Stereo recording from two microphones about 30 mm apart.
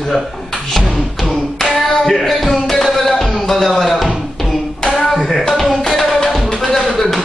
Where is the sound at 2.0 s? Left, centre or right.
Centre.